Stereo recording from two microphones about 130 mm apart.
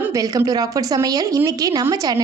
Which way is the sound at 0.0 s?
25° right (ahead or behind).